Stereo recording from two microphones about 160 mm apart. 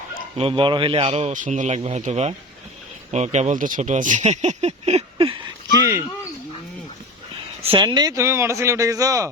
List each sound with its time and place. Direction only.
0.3 s speech: 35° right (ahead or behind)
5.1 s a sound: 35° right (ahead or behind)
7.6 s speech: 35° right (ahead or behind)